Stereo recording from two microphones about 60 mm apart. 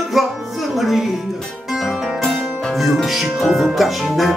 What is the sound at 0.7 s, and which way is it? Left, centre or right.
Music, centre.